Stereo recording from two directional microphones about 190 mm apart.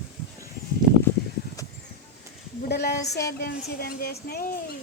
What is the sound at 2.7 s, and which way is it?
Speech, 55° left (ahead or behind).